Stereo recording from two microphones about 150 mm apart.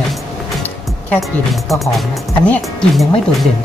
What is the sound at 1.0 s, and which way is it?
Speech, centre (ahead or behind).